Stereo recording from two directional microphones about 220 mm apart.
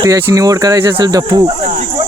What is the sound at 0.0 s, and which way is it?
Speech, 15° right (ahead or behind).